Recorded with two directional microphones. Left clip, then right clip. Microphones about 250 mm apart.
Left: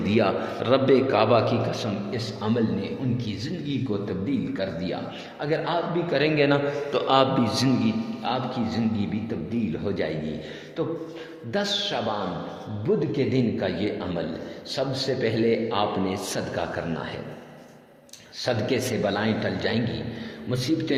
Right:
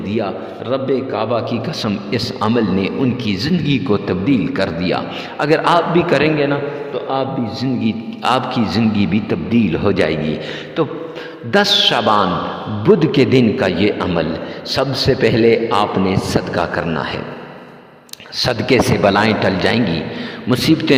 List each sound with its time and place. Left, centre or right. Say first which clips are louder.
0.1 s a man's voice: right 1 dB; centre
1.8 s a man's voice: right 9 dB; right
6.3 s a man's voice: right 4 dB; centre
7.9 s a man's voice: right 10 dB; right
11.5 s a man's voice: right 13 dB; right
18.3 s a man's voice: right 11 dB; right